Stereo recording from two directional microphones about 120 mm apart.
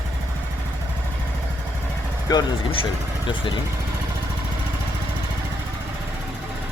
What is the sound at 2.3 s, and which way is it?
Speech, 30° left (ahead or behind).